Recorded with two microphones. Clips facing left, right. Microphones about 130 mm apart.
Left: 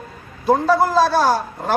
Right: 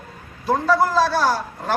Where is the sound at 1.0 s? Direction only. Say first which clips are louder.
Left 3 dB; 45° left (ahead or behind).